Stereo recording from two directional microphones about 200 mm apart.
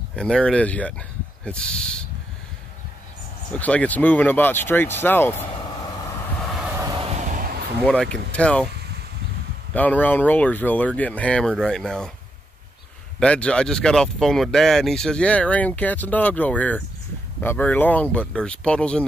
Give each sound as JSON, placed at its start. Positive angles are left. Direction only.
{"t": 0.1, "sound": "speech", "side_deg": 5}
{"t": 3.5, "sound": "speech", "side_deg": 5}
{"t": 6.9, "sound": "a sound", "side_deg": -30}
{"t": 7.8, "sound": "speech", "side_deg": 5}
{"t": 9.8, "sound": "speech", "side_deg": 10}
{"t": 13.2, "sound": "speech", "side_deg": 5}